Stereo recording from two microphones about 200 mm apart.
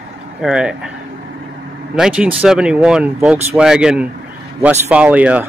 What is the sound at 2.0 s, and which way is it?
Speech, 5° right (ahead or behind).